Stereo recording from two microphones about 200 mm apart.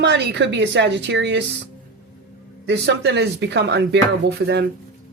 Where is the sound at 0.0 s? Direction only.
60° right (ahead or behind).